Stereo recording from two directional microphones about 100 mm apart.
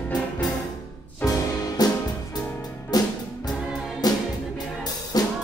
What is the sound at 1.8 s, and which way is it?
Music, 40° left (ahead or behind).